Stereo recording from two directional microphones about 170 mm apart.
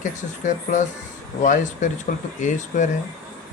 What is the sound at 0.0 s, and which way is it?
Speech, 50° left (ahead or behind).